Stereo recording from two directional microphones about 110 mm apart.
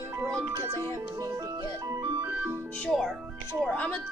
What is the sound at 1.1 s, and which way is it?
Music, 30° right (ahead or behind).